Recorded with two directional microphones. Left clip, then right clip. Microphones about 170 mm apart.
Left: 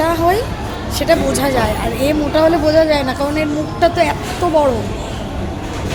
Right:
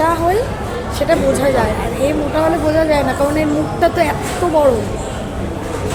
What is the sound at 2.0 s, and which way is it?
A woman's voice, 50° left (ahead or behind).